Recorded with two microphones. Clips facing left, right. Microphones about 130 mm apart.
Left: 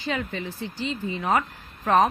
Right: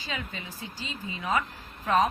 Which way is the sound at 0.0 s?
55° left (ahead or behind).